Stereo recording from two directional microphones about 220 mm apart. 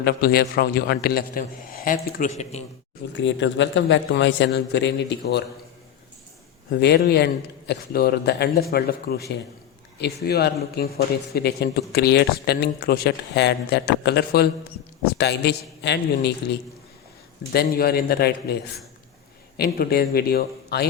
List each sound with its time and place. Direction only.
0.0 s a man's voice: 45° left (ahead or behind)
3.2 s speech: 55° left (ahead or behind)
6.7 s speech: 50° left (ahead or behind)
17.7 s speech: 45° left (ahead or behind)